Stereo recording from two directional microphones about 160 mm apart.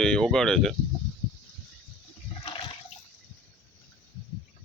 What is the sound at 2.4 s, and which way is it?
Toilet flush, 30° left (ahead or behind).